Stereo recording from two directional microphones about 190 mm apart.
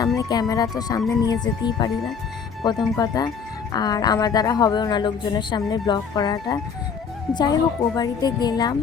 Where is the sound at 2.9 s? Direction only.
20° left (ahead or behind).